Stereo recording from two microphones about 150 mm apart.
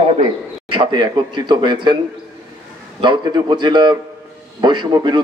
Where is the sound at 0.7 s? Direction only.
35° right (ahead or behind).